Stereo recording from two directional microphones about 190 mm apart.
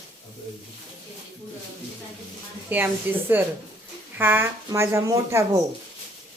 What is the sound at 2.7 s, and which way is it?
Speech, 10° right (ahead or behind).